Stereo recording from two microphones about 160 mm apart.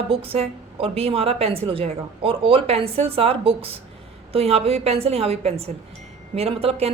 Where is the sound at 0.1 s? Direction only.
35° right (ahead or behind).